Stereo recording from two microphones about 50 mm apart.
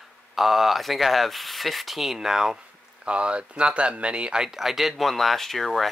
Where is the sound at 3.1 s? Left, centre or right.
Right.